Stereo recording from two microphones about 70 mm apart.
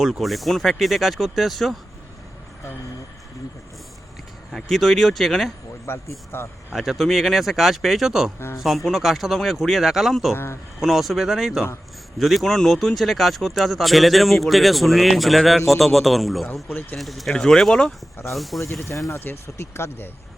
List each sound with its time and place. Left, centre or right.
0.0 s speech: centre
4.5 s speech: centre
5.8 s speech: left
6.7 s speech: centre
10.3 s speech: left
10.8 s speech: centre
18.6 s speech: left